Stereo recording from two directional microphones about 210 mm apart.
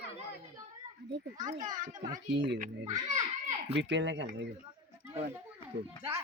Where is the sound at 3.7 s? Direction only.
55° right (ahead or behind).